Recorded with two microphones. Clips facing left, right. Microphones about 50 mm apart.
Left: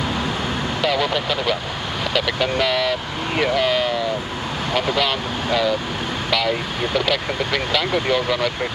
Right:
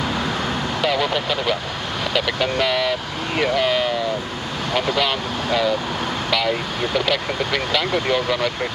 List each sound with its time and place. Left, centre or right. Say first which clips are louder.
0.8 s speech: even; centre